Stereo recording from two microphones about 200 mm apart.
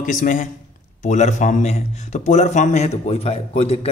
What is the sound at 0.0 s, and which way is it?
A man's voice, 40° left (ahead or behind).